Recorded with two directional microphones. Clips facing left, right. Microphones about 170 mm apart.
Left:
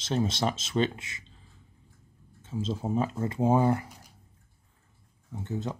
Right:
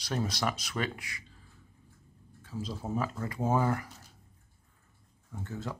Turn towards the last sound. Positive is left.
turn(degrees=20)  # may be behind; listen again after turning